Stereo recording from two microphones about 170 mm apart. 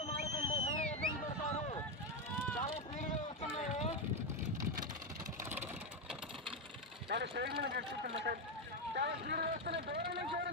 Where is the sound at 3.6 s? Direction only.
40° left (ahead or behind).